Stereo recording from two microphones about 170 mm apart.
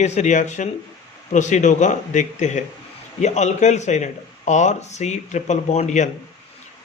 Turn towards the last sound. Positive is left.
turn(degrees=45)  # may be behind; listen again after turning